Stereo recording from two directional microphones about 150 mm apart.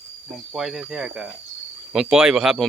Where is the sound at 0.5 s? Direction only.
Centre (ahead or behind).